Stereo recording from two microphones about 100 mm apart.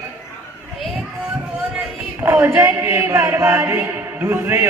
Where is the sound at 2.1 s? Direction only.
20° right (ahead or behind).